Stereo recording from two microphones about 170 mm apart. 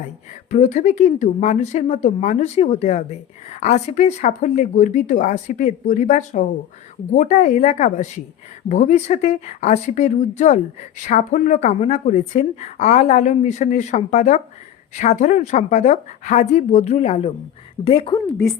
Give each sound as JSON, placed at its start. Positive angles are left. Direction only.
{"t": 0.5, "sound": "a woman's voice", "side_deg": 45}